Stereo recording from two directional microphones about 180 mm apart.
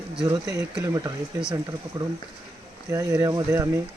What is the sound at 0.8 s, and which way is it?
Speech, 20° right (ahead or behind).